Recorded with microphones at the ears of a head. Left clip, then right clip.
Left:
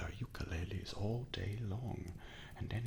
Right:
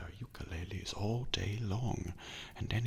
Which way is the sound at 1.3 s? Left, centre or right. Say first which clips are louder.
Right 7 dB; right.